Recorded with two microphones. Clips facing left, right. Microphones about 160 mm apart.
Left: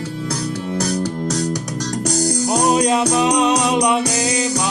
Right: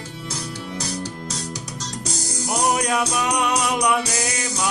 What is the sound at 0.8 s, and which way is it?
Music, 60° left (ahead or behind).